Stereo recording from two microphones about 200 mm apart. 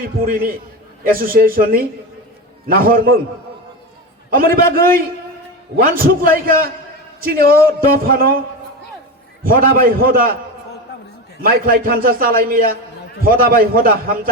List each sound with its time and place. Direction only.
0.3 s a man's voice: 45° right (ahead or behind)
4.3 s a man's voice: 45° right (ahead or behind)
5.7 s a man's voice: 45° right (ahead or behind)
9.4 s a man's voice: 45° right (ahead or behind)
11.4 s a man's voice: 45° right (ahead or behind)